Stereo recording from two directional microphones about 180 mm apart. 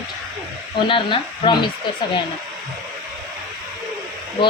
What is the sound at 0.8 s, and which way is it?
Speech, 30° left (ahead or behind).